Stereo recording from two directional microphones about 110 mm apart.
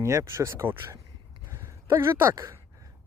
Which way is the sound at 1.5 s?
25° right (ahead or behind).